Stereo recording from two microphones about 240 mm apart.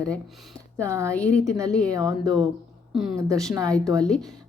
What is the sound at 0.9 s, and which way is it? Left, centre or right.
Speech, centre.